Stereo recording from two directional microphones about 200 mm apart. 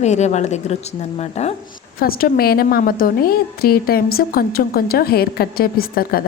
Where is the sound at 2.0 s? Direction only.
45° left (ahead or behind).